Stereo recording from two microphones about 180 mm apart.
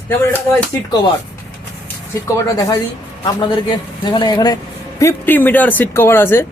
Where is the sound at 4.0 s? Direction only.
25° left (ahead or behind).